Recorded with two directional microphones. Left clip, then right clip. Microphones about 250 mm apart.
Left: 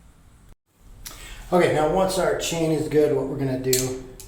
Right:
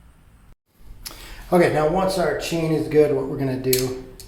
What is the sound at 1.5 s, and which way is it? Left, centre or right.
Speech, right.